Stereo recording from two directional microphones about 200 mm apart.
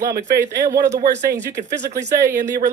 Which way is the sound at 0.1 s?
55° right (ahead or behind).